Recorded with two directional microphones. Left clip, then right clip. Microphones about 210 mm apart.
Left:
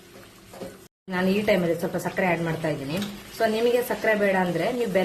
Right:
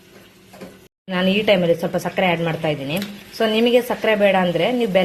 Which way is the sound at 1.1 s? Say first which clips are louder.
Right 6 dB; 20° right (ahead or behind).